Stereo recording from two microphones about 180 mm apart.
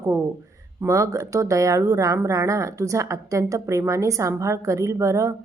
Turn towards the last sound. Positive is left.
turn(degrees=-15)  # may be behind; listen again after turning